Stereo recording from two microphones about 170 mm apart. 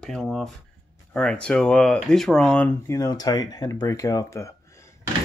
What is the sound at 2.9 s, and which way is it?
Speech, 20° left (ahead or behind).